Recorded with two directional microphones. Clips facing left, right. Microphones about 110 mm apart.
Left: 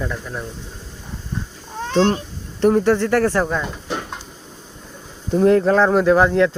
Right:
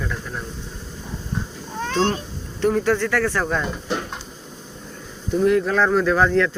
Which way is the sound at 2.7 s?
25° left (ahead or behind).